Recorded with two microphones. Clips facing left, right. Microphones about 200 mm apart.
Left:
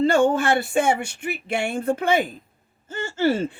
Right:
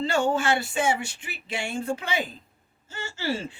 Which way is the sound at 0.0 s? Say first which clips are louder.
Left 6 dB; 55° left (ahead or behind).